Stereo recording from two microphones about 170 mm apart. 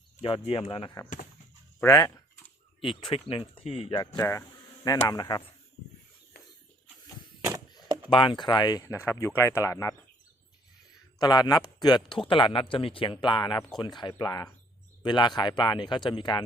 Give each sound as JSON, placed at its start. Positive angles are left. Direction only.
{"t": 0.2, "sound": "speech", "side_deg": 30}
{"t": 1.0, "sound": "speech", "side_deg": 20}
{"t": 2.8, "sound": "speech", "side_deg": 30}
{"t": 4.0, "sound": "speech", "side_deg": 20}
{"t": 4.4, "sound": "insect", "side_deg": 20}
{"t": 5.0, "sound": "speech", "side_deg": 25}
{"t": 6.3, "sound": "a sound", "side_deg": 70}
{"t": 8.1, "sound": "speech", "side_deg": 30}
{"t": 11.2, "sound": "speech", "side_deg": 25}